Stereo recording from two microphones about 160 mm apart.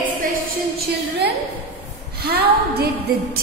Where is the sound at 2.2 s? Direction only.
90° right.